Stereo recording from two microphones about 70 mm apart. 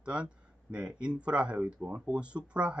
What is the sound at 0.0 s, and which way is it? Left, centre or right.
Speech, centre.